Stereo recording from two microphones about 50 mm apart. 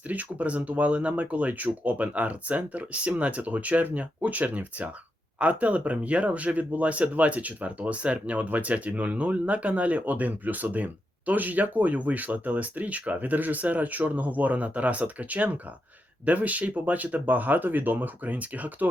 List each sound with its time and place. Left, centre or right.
0.1 s speech: right